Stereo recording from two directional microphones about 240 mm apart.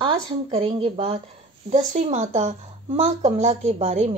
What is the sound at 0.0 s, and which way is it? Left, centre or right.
A woman's voice, right.